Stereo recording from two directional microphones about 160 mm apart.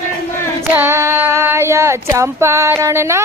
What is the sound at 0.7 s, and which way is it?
Child singing, 15° right (ahead or behind).